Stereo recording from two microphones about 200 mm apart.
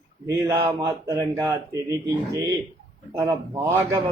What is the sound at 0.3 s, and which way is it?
Speech, 15° right (ahead or behind).